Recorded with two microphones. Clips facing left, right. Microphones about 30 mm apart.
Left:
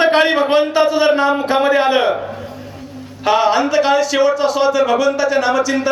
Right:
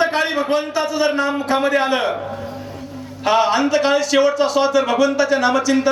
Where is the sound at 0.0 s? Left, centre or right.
Left; by 2.2 s centre.